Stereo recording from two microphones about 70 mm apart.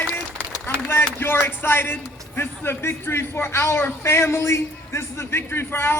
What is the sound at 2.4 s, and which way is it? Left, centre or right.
A man's voice, left.